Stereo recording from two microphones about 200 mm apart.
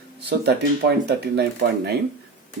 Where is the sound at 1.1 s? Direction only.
55° right (ahead or behind).